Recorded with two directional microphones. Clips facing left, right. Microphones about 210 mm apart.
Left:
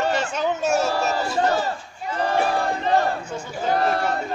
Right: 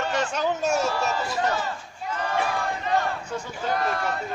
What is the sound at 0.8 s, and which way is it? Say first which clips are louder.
Crowd: left 3 dB; 40° left (ahead or behind).